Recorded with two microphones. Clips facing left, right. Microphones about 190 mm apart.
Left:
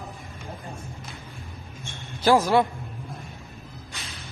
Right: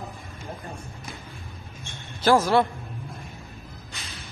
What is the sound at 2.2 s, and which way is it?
Speech, 15° left (ahead or behind).